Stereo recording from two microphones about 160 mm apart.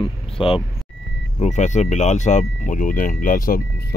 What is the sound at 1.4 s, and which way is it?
Speech, 45° left (ahead or behind).